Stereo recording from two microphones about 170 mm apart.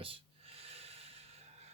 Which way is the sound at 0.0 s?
35° right (ahead or behind).